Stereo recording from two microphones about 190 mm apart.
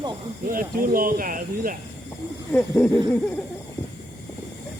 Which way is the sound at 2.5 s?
5° left (ahead or behind).